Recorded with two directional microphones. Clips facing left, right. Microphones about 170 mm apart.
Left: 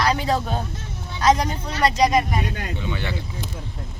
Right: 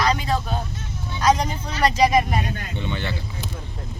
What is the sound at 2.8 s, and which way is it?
Speech, 5° left (ahead or behind).